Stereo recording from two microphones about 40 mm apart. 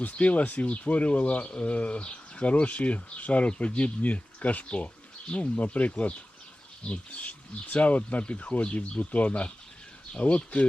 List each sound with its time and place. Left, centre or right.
0.0 s speech: left